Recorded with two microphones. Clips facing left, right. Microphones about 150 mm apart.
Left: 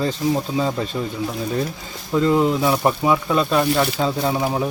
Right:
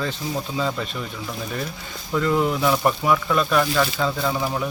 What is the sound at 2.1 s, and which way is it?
Speech, 25° left (ahead or behind).